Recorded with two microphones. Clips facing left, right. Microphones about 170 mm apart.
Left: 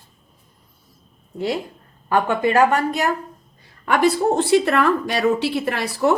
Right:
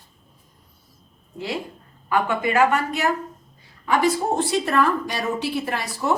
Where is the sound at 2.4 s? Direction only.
35° left (ahead or behind).